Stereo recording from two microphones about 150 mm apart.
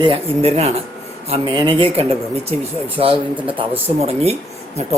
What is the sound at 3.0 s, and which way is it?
Speech, 35° right (ahead or behind).